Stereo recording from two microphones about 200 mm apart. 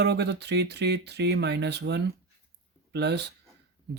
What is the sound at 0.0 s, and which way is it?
Speech, 55° right (ahead or behind).